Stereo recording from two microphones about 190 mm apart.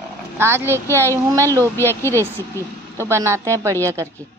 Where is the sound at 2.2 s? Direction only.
15° right (ahead or behind).